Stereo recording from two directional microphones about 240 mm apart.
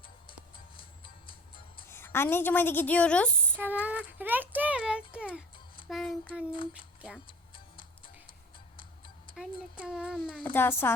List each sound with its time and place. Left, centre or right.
0.8 s music: left
1.9 s a woman's voice: centre
3.6 s child singing: centre
5.1 s speech: centre
5.9 s child singing: centre
7.5 s music: left
9.8 s speech: centre
10.5 s a woman's voice: centre